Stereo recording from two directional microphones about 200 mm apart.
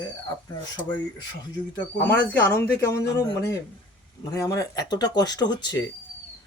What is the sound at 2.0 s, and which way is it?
Speech, 10° left (ahead or behind).